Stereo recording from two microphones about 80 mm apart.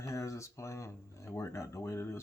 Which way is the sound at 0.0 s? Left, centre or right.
Left.